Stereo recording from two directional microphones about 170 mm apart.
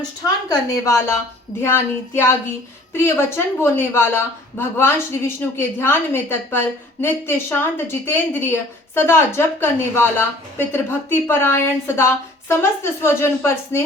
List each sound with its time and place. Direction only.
0.4 s a woman's voice: 20° left (ahead or behind)